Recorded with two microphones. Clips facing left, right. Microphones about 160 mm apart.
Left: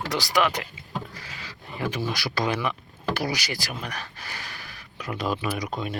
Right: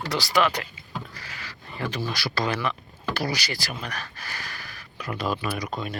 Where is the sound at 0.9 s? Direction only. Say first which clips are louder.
Left 2 dB; 20° left (ahead or behind).